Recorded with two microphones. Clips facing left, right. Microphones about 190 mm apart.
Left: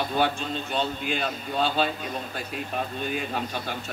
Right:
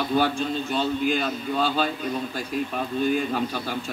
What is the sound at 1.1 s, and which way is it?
Speech, 45° right (ahead or behind).